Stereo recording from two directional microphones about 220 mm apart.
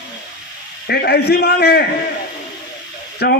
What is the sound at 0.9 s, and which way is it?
Speech, 45° left (ahead or behind).